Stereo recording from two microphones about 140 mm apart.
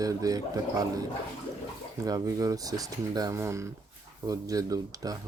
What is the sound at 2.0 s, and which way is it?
Speech, 25° right (ahead or behind).